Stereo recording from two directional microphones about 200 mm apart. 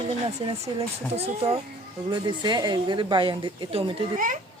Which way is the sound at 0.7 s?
20° right (ahead or behind).